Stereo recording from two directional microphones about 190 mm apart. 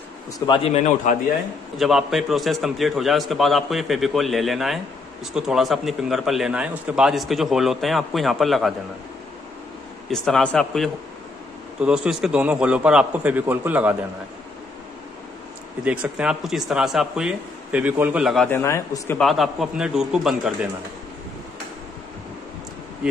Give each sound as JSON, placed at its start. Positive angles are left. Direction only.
{"t": 0.5, "sound": "a man's voice", "side_deg": 30}
{"t": 1.8, "sound": "a man's voice", "side_deg": 0}
{"t": 10.1, "sound": "a man's voice", "side_deg": 5}
{"t": 15.8, "sound": "a man's voice", "side_deg": -5}
{"t": 18.5, "sound": "speech", "side_deg": 10}
{"t": 19.2, "sound": "a man's voice", "side_deg": 0}